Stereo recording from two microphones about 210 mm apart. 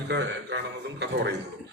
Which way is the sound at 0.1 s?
55° right (ahead or behind).